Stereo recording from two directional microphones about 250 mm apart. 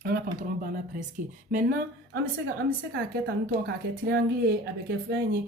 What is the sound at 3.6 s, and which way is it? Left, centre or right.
Speech, right.